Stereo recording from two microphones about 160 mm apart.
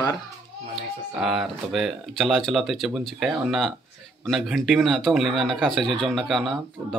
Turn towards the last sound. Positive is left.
turn(degrees=0)  # may be behind; listen again after turning